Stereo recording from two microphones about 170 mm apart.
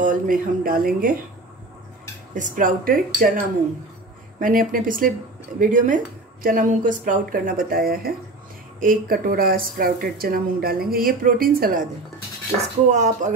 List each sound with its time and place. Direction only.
0.0 s speech: 55° right (ahead or behind)
2.3 s speech: 50° right (ahead or behind)
12.9 s speech: 45° right (ahead or behind)